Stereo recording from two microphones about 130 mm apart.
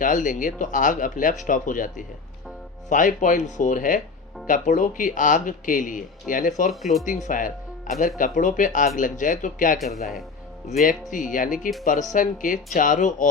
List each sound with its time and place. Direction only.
0.0 s speech: 85° left
6.7 s speech: centre (ahead or behind)
7.0 s speech: 80° left
9.7 s speech: centre (ahead or behind)
10.8 s speech: 90° left
12.7 s speech: 75° left (ahead or behind)